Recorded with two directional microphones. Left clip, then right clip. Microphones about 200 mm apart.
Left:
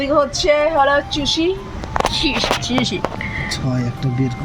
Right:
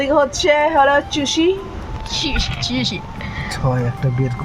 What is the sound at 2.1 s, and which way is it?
Speech, 50° right (ahead or behind).